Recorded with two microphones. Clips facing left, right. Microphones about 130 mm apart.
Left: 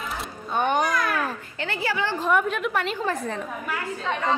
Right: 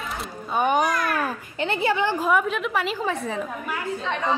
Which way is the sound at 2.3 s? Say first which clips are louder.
Right 1 dB; centre (ahead or behind).